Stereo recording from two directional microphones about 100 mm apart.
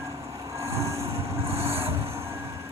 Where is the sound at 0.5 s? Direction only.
30° right (ahead or behind).